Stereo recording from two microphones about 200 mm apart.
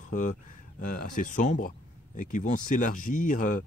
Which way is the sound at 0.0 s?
40° left (ahead or behind).